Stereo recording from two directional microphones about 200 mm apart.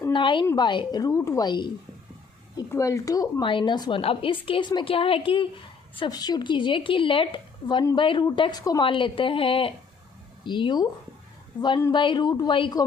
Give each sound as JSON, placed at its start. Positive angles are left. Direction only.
{"t": 0.1, "sound": "a woman's voice", "side_deg": 25}